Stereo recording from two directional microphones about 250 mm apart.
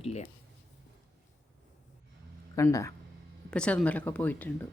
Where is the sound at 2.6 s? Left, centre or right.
Centre.